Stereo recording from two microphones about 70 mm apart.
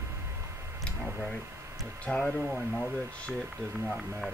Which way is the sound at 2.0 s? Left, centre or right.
Centre.